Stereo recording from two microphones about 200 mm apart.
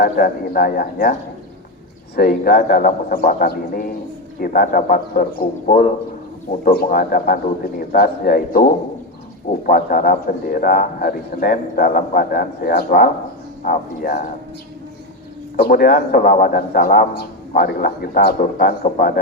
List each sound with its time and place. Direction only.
0.0 s a man's voice: 45° left (ahead or behind)
2.1 s a man's voice: 45° left (ahead or behind)
15.5 s a man's voice: 50° left (ahead or behind)